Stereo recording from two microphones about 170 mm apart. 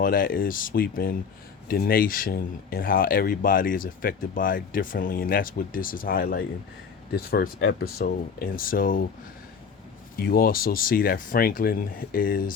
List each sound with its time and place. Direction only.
0.0 s speech: 55° left (ahead or behind)
10.2 s speech: 60° left (ahead or behind)